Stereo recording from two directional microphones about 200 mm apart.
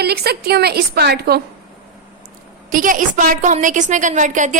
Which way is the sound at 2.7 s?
40° right (ahead or behind).